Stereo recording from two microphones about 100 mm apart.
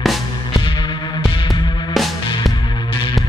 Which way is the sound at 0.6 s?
55° left (ahead or behind).